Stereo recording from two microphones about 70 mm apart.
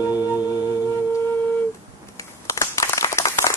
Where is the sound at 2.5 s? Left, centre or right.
Left.